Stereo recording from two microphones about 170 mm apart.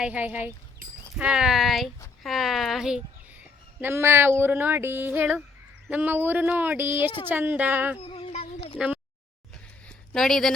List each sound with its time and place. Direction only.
0.0 s a woman's voice: 5° right (ahead or behind)
7.9 s a sound: 35° left (ahead or behind)
10.1 s speech: 5° left (ahead or behind)